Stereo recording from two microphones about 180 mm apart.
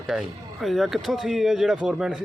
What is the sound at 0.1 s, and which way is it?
Speech, 5° right (ahead or behind).